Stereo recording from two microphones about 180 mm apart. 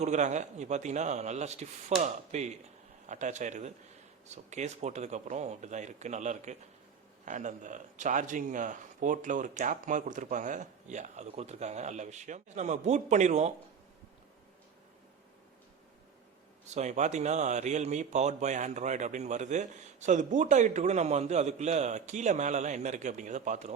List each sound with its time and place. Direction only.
0.0 s speech: 40° right (ahead or behind)
16.6 s speech: 40° right (ahead or behind)